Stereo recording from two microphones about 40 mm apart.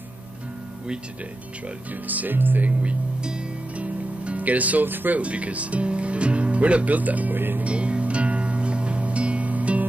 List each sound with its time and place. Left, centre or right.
2.0 s speech: right
3.7 s music: right
4.8 s speech: right
5.2 s speech: right
7.3 s speech: right
7.6 s music: right